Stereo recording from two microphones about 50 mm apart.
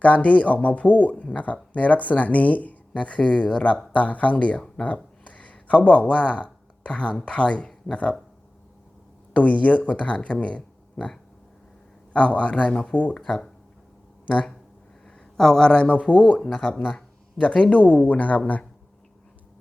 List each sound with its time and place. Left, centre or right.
0.0 s speech: left
9.3 s speech: left
12.1 s speech: left
15.0 s a sound: centre
15.9 s speech: left